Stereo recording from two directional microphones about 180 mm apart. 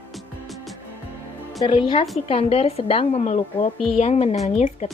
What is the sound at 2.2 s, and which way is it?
A woman's voice, 30° left (ahead or behind).